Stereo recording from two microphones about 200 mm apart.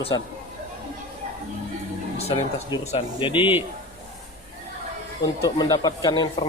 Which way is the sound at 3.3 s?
10° right (ahead or behind).